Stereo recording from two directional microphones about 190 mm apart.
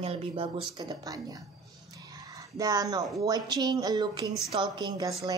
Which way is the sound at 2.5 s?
20° right (ahead or behind).